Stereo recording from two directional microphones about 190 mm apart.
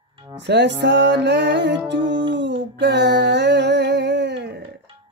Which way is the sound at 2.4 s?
70° right (ahead or behind).